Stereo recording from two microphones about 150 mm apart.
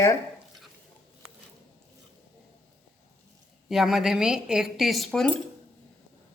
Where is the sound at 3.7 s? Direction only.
Centre (ahead or behind).